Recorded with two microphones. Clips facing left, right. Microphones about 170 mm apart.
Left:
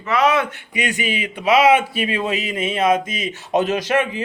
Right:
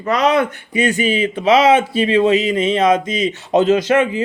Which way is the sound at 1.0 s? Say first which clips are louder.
Right 7 dB; 15° left (ahead or behind).